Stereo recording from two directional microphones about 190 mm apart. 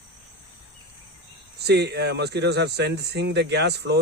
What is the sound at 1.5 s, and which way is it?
Speech, 60° right (ahead or behind).